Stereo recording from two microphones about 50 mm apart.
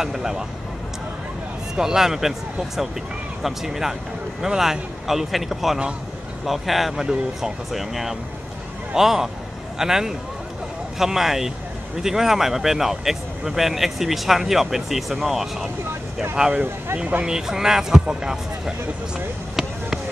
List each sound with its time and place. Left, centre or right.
0.0 s speech: centre
1.8 s speech: centre
16.4 s speech: centre